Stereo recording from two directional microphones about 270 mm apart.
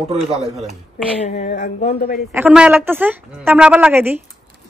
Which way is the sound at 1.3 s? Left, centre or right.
Left.